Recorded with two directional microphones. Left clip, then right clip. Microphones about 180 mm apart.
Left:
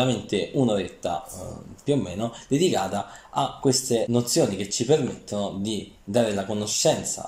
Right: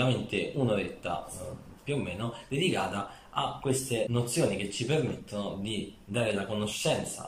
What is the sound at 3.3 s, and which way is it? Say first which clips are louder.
Speech: left 7 dB; 45° left (ahead or behind).